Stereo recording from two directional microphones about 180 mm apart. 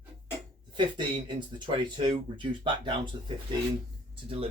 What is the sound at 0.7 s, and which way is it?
Speech, 25° right (ahead or behind).